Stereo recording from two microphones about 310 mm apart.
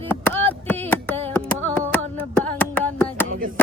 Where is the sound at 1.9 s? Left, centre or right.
Centre.